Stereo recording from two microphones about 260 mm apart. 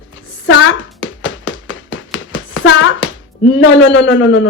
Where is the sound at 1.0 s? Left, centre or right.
Left.